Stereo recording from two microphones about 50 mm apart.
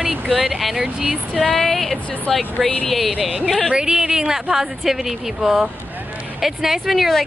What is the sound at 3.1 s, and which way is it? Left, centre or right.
Speech, centre.